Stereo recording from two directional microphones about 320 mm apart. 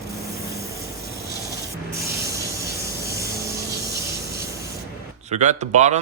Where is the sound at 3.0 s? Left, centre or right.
Centre.